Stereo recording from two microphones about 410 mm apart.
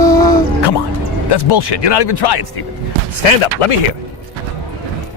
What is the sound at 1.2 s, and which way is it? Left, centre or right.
Speech, left.